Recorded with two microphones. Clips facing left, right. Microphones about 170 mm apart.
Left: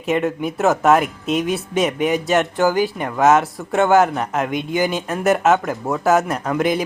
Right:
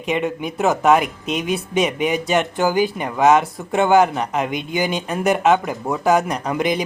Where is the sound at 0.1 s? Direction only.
Centre (ahead or behind).